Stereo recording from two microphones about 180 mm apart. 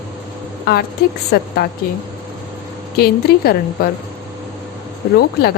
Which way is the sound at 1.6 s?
60° left (ahead or behind).